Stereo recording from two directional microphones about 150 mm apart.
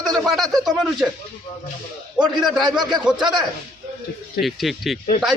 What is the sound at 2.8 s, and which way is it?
Speech, 30° right (ahead or behind).